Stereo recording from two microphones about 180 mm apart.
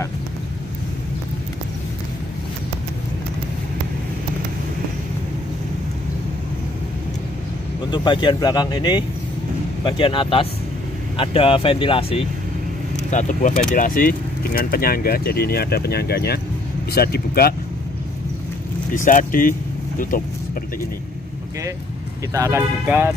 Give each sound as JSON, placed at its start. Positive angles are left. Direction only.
{"t": 7.9, "sound": "speech", "side_deg": 25}
{"t": 13.1, "sound": "speech", "side_deg": 45}
{"t": 18.9, "sound": "speech", "side_deg": 50}
{"t": 22.3, "sound": "speech", "side_deg": -15}